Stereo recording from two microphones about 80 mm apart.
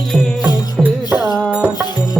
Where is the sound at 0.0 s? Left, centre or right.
Centre.